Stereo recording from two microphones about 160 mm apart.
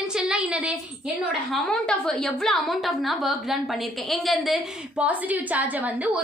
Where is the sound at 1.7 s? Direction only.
5° left (ahead or behind).